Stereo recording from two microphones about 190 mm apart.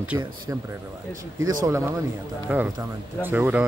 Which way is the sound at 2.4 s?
5° right (ahead or behind).